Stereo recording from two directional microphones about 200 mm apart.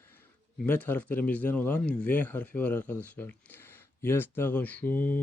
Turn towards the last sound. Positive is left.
turn(degrees=10)  # may be behind; listen again after turning